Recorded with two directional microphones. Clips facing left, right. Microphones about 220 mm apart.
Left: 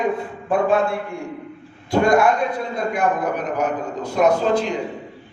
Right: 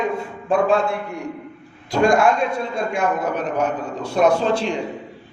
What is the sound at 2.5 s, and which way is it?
A man's voice, 25° right (ahead or behind).